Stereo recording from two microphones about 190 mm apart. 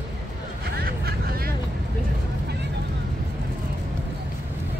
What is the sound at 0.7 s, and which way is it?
Vehicle, 55° right (ahead or behind).